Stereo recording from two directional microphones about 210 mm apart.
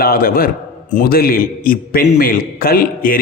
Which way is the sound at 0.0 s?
45° left (ahead or behind).